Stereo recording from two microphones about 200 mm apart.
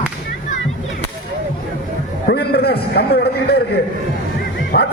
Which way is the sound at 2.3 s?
55° left (ahead or behind).